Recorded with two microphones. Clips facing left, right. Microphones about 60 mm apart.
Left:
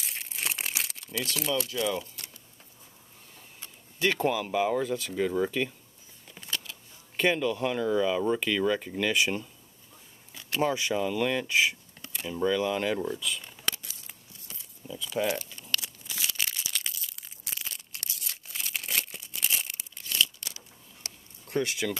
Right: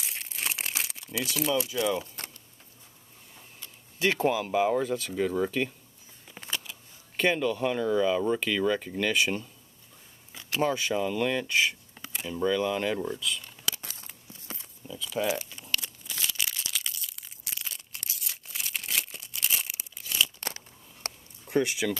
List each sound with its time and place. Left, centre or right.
0.0 s crumpling: centre
4.0 s speech: centre
6.5 s a sound: centre
7.2 s speech: centre
10.7 s speech: centre
13.7 s a sound: right
14.9 s speech: centre
15.2 s keys jangling: centre
15.8 s crushing: centre
20.3 s a sound: right
21.5 s speech: centre